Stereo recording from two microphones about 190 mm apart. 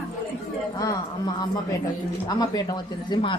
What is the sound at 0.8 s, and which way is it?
A woman's voice, 20° left (ahead or behind).